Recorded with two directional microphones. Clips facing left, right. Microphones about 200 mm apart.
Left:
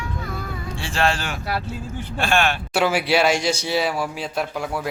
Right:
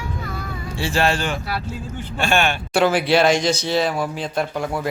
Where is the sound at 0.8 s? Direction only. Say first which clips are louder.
Right 3 dB; 5° right (ahead or behind).